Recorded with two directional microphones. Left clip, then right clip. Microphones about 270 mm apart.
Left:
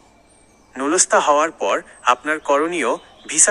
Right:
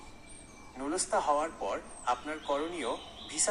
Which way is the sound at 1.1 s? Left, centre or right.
Left.